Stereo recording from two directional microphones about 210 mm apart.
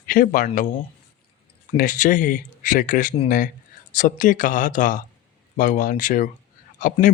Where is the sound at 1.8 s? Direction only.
40° left (ahead or behind).